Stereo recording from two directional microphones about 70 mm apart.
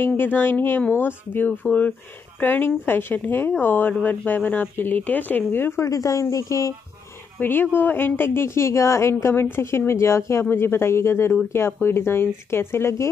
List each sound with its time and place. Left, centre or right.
0.0 s speech: left
5.9 s speech: left
7.3 s speech: left